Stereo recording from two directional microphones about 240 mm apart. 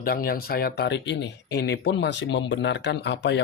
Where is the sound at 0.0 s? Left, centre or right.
Left.